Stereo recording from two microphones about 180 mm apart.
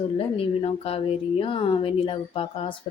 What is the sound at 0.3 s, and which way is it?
A woman's voice, 30° left (ahead or behind).